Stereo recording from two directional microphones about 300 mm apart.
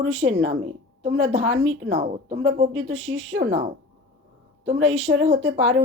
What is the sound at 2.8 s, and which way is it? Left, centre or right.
Speech, right.